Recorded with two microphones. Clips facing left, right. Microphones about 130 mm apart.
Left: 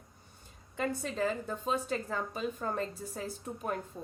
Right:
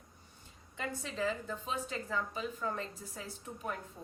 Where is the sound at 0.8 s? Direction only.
45° left (ahead or behind).